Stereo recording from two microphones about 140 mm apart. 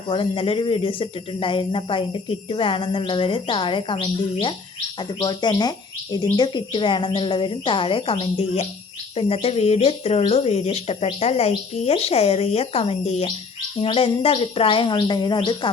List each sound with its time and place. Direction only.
0.1 s speech: 40° left (ahead or behind)